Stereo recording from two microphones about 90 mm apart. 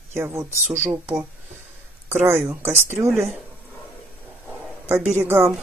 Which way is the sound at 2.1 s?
30° right (ahead or behind).